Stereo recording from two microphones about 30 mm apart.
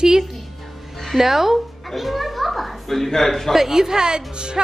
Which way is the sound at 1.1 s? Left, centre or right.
Centre.